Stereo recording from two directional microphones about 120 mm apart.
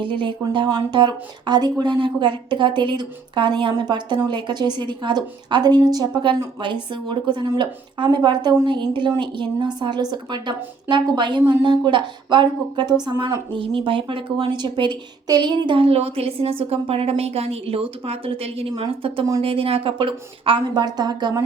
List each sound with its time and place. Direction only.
0.0 s a woman's voice: 45° right (ahead or behind)